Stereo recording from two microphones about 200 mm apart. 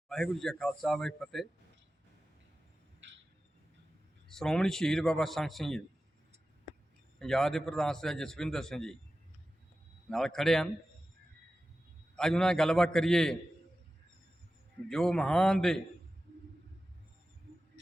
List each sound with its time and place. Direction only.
0.1 s a man's voice: centre (ahead or behind)
4.3 s a man's voice: 5° left (ahead or behind)
7.2 s a man's voice: centre (ahead or behind)
10.1 s a man's voice: centre (ahead or behind)
12.1 s a man's voice: 5° left (ahead or behind)
14.8 s a man's voice: centre (ahead or behind)